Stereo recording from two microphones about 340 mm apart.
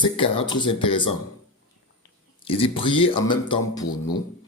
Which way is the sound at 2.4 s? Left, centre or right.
Centre.